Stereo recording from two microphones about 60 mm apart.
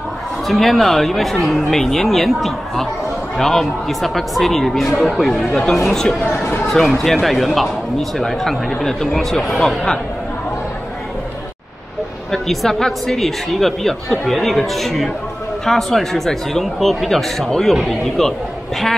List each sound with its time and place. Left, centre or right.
0.5 s speech: centre
6.2 s speech: left
6.6 s speech: centre
12.3 s speech: centre